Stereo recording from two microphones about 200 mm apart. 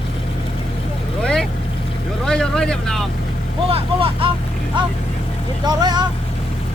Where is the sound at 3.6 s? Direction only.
30° right (ahead or behind).